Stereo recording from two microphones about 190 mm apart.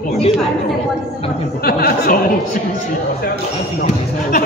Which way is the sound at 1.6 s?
55° left (ahead or behind).